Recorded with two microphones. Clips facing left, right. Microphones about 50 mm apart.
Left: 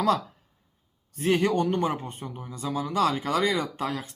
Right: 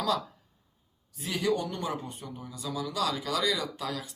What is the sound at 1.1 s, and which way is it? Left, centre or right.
Speech, left.